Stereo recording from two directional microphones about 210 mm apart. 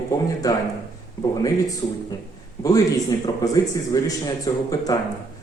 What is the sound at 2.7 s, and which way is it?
A man's voice, 15° left (ahead or behind).